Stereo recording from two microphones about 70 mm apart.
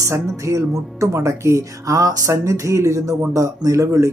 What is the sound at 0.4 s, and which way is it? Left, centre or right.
Speech, right.